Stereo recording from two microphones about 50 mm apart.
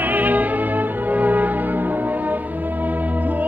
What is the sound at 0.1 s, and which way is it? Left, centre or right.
Music, right.